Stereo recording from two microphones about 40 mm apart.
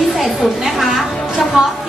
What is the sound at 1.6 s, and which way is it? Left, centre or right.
Speech, centre.